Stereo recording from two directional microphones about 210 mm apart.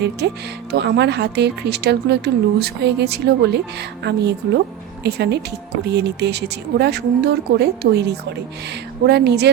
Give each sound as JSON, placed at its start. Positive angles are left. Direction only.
{"t": 0.2, "sound": "speech", "side_deg": -55}